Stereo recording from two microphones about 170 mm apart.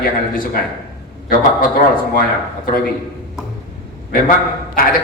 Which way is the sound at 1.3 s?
55° left (ahead or behind).